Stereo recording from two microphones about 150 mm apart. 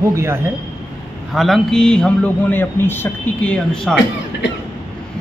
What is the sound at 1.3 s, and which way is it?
A man's voice, centre (ahead or behind).